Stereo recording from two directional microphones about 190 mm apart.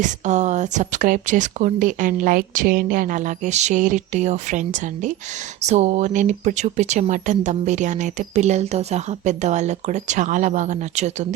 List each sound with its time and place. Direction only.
0.0 s speech: 40° right (ahead or behind)